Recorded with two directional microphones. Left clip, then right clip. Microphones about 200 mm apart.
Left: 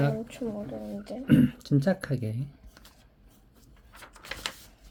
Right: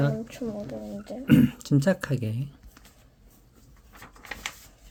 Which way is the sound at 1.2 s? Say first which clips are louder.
Right 2 dB; 25° right (ahead or behind).